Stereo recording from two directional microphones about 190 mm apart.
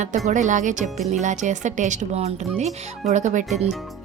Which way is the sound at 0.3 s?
40° right (ahead or behind).